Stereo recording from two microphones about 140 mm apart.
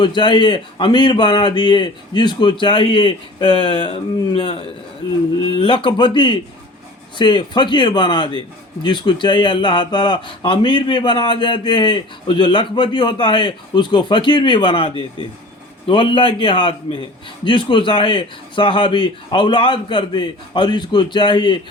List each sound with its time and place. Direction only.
0.0 s a man's voice: 35° left (ahead or behind)